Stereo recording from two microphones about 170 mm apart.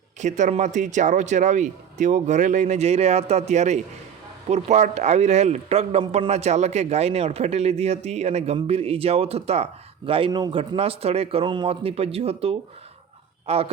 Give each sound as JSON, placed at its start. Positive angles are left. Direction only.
{"t": 0.2, "sound": "a man's voice", "side_deg": -45}